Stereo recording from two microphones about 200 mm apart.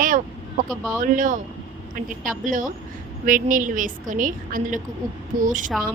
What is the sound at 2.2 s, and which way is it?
A woman's voice, 40° right (ahead or behind).